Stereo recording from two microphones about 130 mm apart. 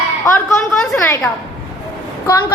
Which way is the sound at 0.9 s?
15° left (ahead or behind).